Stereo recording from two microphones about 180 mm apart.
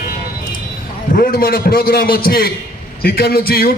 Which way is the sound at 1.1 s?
55° left (ahead or behind).